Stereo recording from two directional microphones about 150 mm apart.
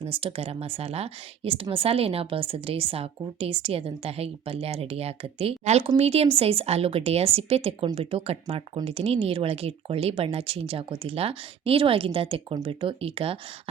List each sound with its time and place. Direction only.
0.0 s speech: 40° right (ahead or behind)